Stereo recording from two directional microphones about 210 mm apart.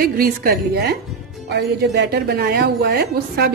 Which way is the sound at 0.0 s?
45° right (ahead or behind).